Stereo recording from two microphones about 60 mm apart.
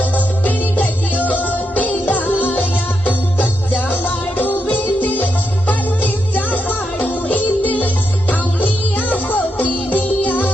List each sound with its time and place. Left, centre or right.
0.0 s music: left